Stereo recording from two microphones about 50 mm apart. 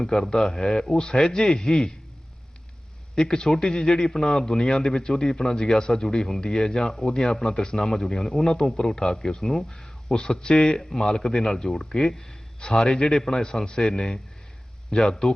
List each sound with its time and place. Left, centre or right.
0.0 s a man's voice: centre
3.2 s a man's voice: centre
13.7 s a man's voice: centre
15.1 s a man's voice: centre